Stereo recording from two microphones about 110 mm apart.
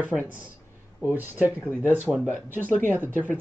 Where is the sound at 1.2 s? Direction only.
15° right (ahead or behind).